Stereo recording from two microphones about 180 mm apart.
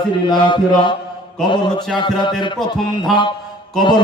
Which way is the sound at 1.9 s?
25° left (ahead or behind).